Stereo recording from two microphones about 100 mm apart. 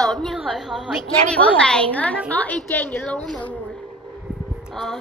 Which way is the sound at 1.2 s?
15° left (ahead or behind).